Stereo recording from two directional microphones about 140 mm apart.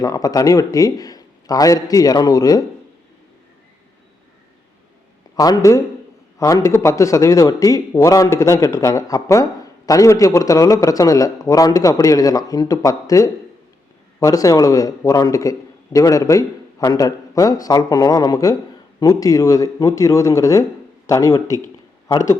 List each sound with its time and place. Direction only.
0.0 s a man's voice: 25° left (ahead or behind)
5.4 s a man's voice: 25° left (ahead or behind)